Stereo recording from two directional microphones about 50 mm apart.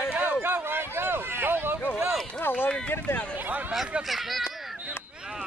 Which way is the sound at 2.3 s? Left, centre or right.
Left.